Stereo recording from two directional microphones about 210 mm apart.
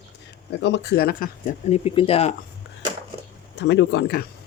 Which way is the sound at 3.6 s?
55° left (ahead or behind).